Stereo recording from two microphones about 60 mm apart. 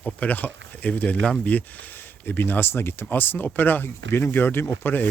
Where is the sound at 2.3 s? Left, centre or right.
Left.